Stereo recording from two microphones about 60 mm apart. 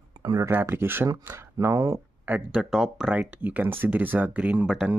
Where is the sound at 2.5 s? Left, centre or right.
Centre.